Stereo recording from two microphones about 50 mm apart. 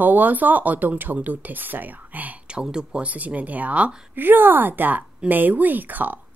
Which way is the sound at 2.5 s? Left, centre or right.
Centre.